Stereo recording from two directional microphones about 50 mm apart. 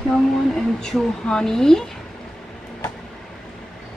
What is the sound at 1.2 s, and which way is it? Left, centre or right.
Speech, centre.